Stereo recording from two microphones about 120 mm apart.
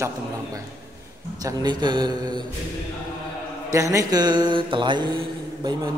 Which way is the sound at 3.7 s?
25° right (ahead or behind).